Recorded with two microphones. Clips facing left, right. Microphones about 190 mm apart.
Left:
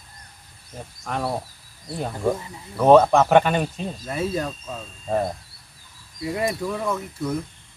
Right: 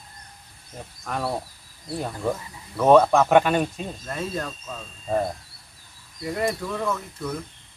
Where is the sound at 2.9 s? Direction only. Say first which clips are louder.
Left 2 dB; centre (ahead or behind).